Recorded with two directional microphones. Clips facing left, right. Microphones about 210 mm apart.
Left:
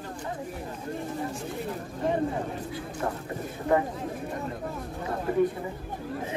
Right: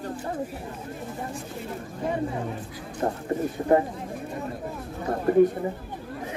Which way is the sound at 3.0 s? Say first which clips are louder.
Right 8 dB; 30° right (ahead or behind).